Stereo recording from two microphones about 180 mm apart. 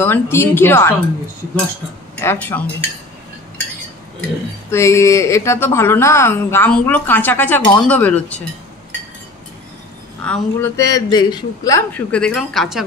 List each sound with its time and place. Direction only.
0.0 s a woman's voice: 10° left (ahead or behind)
2.2 s a woman's voice: 10° left (ahead or behind)
4.6 s a woman's voice: 15° left (ahead or behind)
10.2 s a woman's voice: 5° left (ahead or behind)
10.8 s a man's voice: 20° left (ahead or behind)
12.1 s speech: 5° left (ahead or behind)